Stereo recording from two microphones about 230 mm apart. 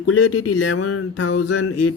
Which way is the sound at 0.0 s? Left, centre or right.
Left.